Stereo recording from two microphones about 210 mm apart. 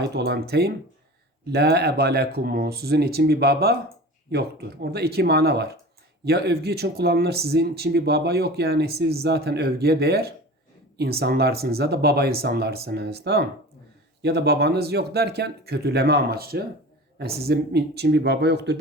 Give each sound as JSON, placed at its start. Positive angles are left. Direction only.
{"t": 0.0, "sound": "speech", "side_deg": -50}